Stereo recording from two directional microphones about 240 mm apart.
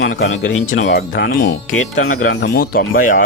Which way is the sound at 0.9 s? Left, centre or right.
Left.